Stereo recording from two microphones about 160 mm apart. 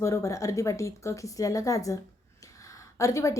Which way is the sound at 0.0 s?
20° left (ahead or behind).